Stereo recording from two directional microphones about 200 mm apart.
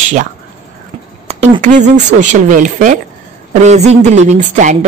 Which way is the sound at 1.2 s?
35° right (ahead or behind).